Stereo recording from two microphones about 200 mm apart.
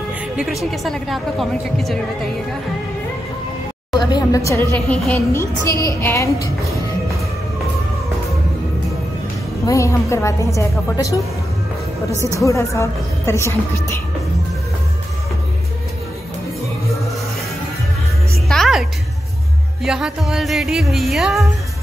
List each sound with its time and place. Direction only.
0.4 s speech: centre (ahead or behind)
4.0 s a woman's voice: 20° left (ahead or behind)
9.7 s a woman's voice: 15° left (ahead or behind)
12.4 s a woman's voice: 15° left (ahead or behind)
18.5 s music: centre (ahead or behind)
19.8 s speech: centre (ahead or behind)